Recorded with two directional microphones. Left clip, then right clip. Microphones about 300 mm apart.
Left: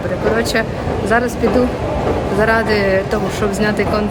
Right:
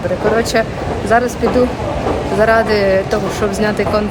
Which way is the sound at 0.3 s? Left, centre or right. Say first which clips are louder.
Right 2 dB; centre.